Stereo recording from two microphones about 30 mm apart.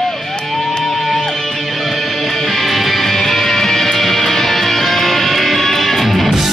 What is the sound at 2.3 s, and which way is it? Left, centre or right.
Music, centre.